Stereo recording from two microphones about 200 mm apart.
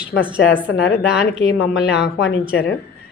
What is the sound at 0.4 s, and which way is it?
A woman's voice, 65° left (ahead or behind).